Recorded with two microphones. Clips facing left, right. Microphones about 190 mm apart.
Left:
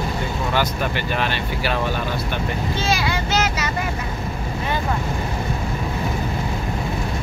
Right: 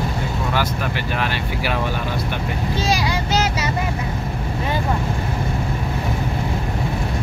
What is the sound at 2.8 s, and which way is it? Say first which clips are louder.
Vehicle: right 2 dB; 35° right (ahead or behind).